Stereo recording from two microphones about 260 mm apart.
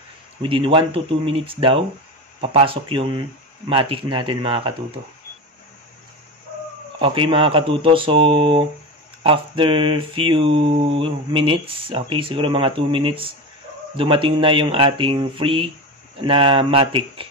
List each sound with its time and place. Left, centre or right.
0.4 s mantra: centre
7.0 s mantra: centre